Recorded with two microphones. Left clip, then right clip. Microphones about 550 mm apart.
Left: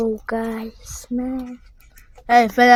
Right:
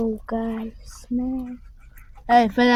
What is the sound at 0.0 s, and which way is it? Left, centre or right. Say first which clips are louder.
Speech: left 4 dB; right.